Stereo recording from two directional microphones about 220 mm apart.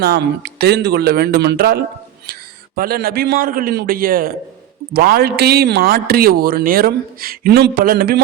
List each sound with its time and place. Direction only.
0.0 s a man's voice: 45° right (ahead or behind)